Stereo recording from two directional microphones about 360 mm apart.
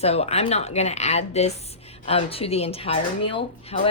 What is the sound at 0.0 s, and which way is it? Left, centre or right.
Speech, centre.